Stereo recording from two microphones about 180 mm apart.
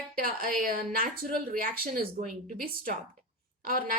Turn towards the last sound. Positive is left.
turn(degrees=-50)  # may be behind; listen again after turning